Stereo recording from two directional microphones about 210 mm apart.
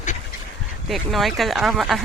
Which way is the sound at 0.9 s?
Centre (ahead or behind).